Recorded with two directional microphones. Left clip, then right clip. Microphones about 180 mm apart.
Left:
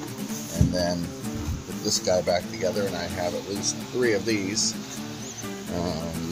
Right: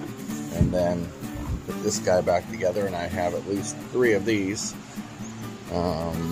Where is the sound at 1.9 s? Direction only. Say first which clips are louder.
Right 1 dB; 15° right (ahead or behind).